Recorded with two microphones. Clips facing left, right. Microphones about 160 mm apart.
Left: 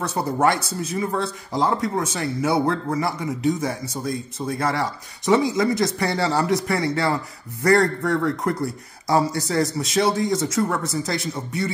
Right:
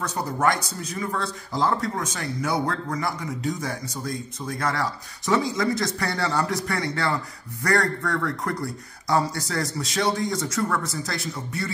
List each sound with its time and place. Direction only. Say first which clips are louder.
0.1 s speech: left 4 dB; 25° left (ahead or behind)